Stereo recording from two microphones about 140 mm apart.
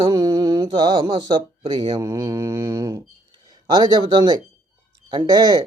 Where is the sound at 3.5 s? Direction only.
30° right (ahead or behind).